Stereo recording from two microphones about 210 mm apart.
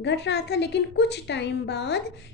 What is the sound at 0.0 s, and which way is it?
A woman's voice, 55° left (ahead or behind).